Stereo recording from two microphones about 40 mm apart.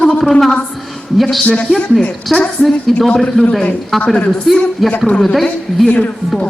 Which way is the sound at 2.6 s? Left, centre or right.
Centre.